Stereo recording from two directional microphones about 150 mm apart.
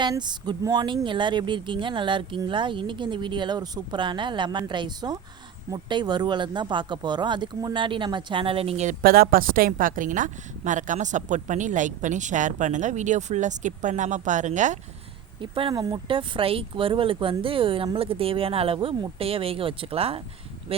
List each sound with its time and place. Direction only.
0.0 s speech: 30° right (ahead or behind); by 14.8 s 55° right (ahead or behind)
15.4 s speech: 35° right (ahead or behind)